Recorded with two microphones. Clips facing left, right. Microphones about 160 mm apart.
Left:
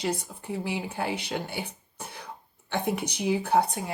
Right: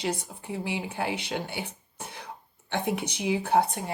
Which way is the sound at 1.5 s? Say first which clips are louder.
Left 1 dB; 50° left (ahead or behind).